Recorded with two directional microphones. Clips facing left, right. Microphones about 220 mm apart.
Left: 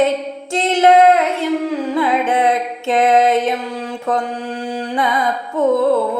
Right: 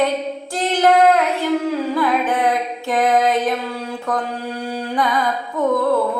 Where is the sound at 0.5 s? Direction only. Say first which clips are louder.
Left 3 dB; 25° left (ahead or behind).